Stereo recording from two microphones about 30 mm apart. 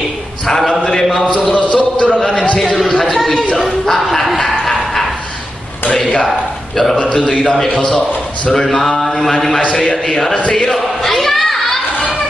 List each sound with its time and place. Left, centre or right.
0.5 s mantra: centre
1.5 s a sound: left
2.6 s speech: centre
3.1 s chatter: centre
3.8 s bow-wow: centre
7.0 s a man's voice: left
7.5 s mantra: centre
10.7 s a sound: centre